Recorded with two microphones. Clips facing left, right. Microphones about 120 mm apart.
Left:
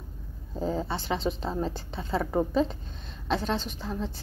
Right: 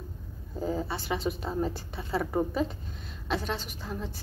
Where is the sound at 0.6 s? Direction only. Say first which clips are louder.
Left 2 dB; 25° left (ahead or behind).